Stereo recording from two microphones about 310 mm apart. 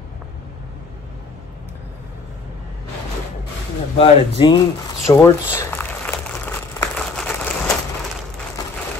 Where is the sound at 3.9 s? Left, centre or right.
Centre.